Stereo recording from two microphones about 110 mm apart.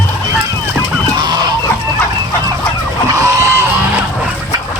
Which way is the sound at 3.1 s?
30° right (ahead or behind).